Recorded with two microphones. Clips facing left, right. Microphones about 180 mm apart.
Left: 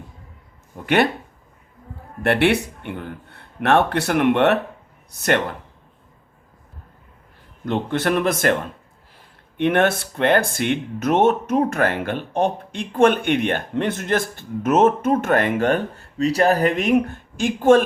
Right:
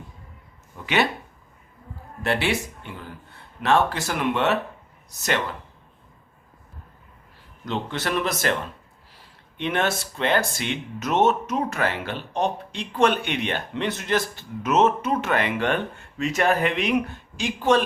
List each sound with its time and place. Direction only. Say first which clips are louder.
0.7 s speech: left 4 dB; 50° left (ahead or behind)
2.2 s speech: left 6 dB; 60° left (ahead or behind)
7.6 s speech: left 6 dB; 55° left (ahead or behind)